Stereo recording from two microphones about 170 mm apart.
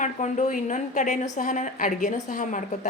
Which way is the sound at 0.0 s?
45° left (ahead or behind).